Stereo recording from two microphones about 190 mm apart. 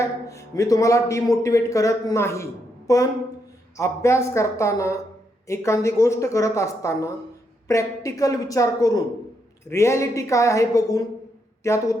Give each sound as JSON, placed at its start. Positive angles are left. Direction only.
{"t": 0.0, "sound": "a man's voice", "side_deg": 15}